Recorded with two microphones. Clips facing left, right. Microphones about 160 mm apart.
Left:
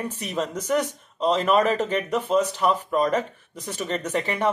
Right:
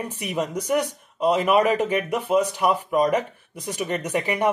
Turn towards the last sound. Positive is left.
turn(degrees=-15)  # may be behind; listen again after turning